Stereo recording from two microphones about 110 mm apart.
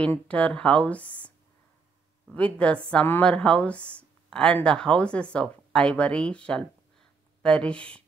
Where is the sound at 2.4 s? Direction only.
10° left (ahead or behind).